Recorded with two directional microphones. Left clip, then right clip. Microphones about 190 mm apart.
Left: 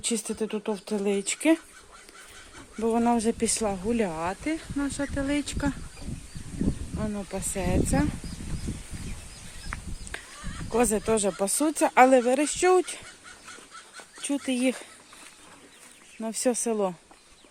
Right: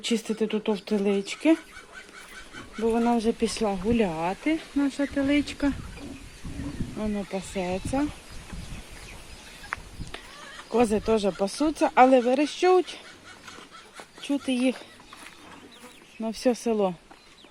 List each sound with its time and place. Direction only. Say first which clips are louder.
0.0 s speech: right 3 dB; 10° left (ahead or behind)
2.8 s speech: even; 25° left (ahead or behind); by 5.7 s 5° left (ahead or behind)
7.0 s speech: right 1 dB; 10° left (ahead or behind)
9.7 s a sound: right 5 dB; 5° left (ahead or behind)
10.8 s speech: right 1 dB; 15° left (ahead or behind)
14.2 s speech: right 1 dB; 25° left (ahead or behind)
16.2 s speech: right 1 dB; 20° left (ahead or behind)